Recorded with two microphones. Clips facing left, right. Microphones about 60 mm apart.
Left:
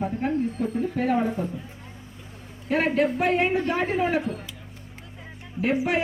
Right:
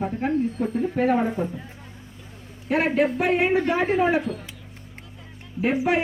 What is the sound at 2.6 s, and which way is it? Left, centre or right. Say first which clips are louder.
Speech: right 1 dB; centre.